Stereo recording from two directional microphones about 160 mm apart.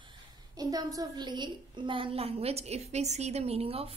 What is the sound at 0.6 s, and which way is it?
A woman's voice, 25° right (ahead or behind).